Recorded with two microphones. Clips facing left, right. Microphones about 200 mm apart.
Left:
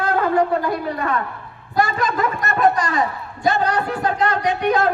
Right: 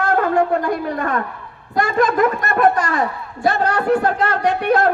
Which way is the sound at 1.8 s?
50° right (ahead or behind).